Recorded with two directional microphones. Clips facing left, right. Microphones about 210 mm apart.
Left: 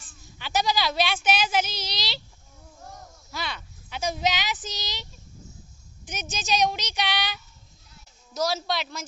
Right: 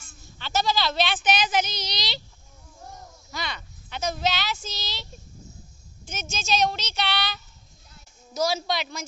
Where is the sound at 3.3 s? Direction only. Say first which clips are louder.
Even; 5° left (ahead or behind).